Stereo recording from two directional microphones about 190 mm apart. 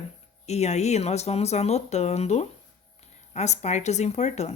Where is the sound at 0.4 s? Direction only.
35° left (ahead or behind).